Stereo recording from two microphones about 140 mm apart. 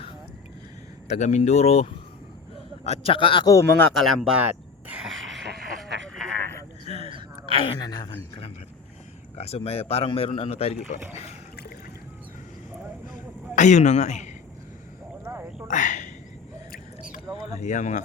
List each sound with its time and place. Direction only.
1.0 s a man's voice: 50° left (ahead or behind); by 3.5 s 35° left (ahead or behind)
3.9 s speech: centre (ahead or behind)
4.4 s speech: 10° right (ahead or behind)
5.0 s vehicle: centre (ahead or behind)
6.4 s a sound: 20° left (ahead or behind)
6.8 s gasp: 45° right (ahead or behind)
7.6 s a woman's voice: 35° left (ahead or behind)
9.4 s speech: 45° left (ahead or behind)
13.6 s a man's voice: 55° left (ahead or behind)
15.2 s a sound: 15° right (ahead or behind)
15.6 s a sound: 65° left (ahead or behind)
17.5 s a man's voice: 60° left (ahead or behind)